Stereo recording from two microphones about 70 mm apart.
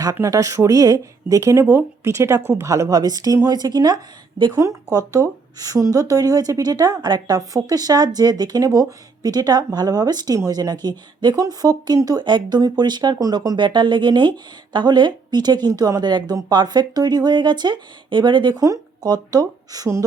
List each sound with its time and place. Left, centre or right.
0.2 s a woman's voice: right
2.9 s a woman's voice: right
3.4 s speech: right
5.5 s a woman's voice: right
7.1 s speech: right
12.0 s speech: right
15.7 s speech: right
18.6 s speech: right